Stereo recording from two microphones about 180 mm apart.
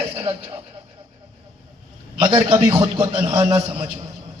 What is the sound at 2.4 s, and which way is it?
A man's voice, 25° right (ahead or behind).